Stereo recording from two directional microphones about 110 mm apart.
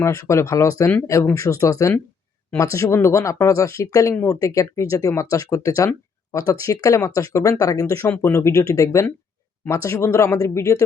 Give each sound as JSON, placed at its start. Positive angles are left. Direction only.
{"t": 0.0, "sound": "speech", "side_deg": 25}